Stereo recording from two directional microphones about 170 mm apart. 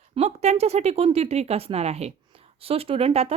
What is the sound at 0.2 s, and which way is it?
Speech, 40° right (ahead or behind).